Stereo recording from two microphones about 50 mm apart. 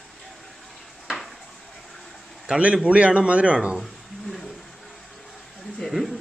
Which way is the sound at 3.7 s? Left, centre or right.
Centre.